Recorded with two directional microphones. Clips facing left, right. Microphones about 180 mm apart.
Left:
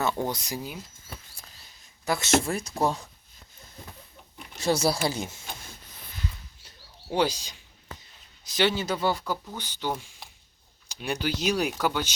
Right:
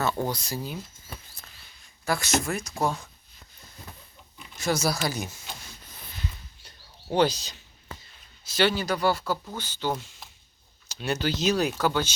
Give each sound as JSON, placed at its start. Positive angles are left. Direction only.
{"t": 0.3, "sound": "speech", "side_deg": 20}
{"t": 2.0, "sound": "speech", "side_deg": 25}
{"t": 4.5, "sound": "speech", "side_deg": 30}
{"t": 7.1, "sound": "speech", "side_deg": 10}